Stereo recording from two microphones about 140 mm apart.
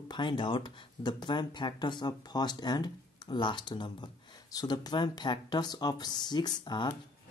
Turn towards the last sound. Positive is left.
turn(degrees=30)  # may be behind; listen again after turning